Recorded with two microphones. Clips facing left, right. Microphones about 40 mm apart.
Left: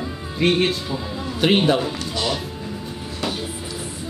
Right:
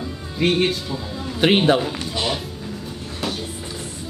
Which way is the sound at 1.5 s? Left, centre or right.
Right.